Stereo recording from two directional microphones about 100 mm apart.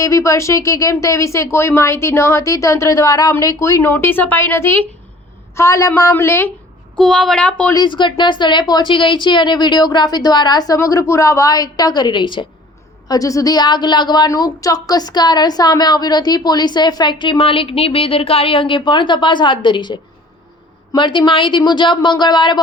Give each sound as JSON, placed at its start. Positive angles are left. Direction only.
{"t": 0.0, "sound": "a woman's voice", "side_deg": 30}
{"t": 6.9, "sound": "a woman's voice", "side_deg": 5}
{"t": 7.9, "sound": "a woman's voice", "side_deg": 50}
{"t": 13.1, "sound": "a woman's voice", "side_deg": 35}